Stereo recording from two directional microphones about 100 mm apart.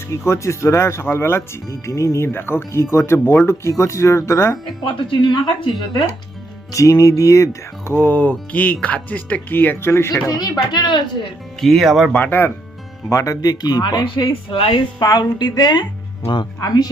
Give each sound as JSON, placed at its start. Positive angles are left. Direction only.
{"t": 0.1, "sound": "speech", "side_deg": 30}
{"t": 4.8, "sound": "speech", "side_deg": 50}
{"t": 6.7, "sound": "speech", "side_deg": 35}
{"t": 10.2, "sound": "speech", "side_deg": 40}
{"t": 11.6, "sound": "speech", "side_deg": 0}
{"t": 12.1, "sound": "speech", "side_deg": 15}
{"t": 13.1, "sound": "speech", "side_deg": 30}
{"t": 14.9, "sound": "speech", "side_deg": 45}
{"t": 16.6, "sound": "speech", "side_deg": 40}